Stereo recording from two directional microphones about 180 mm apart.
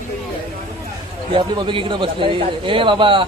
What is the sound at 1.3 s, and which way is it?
A man's voice, 30° right (ahead or behind).